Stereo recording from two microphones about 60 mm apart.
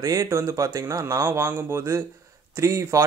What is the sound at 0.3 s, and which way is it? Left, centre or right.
Speech, right.